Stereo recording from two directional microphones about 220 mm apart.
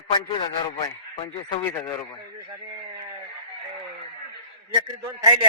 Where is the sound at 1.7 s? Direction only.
15° left (ahead or behind).